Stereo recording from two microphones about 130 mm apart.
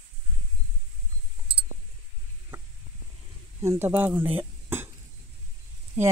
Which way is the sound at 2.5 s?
15° right (ahead or behind).